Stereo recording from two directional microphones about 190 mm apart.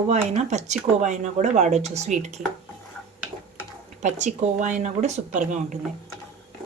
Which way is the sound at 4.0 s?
40° right (ahead or behind).